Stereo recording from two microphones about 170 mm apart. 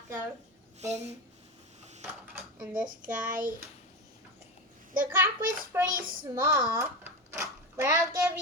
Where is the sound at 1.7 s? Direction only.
40° right (ahead or behind).